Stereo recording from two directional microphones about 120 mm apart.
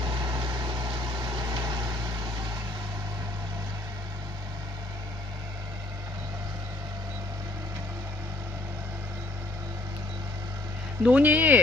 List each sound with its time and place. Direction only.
0.0 s vehicle: 35° right (ahead or behind)
11.0 s speech: 10° right (ahead or behind)